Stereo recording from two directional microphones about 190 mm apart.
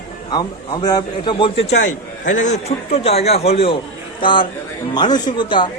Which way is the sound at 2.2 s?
40° left (ahead or behind).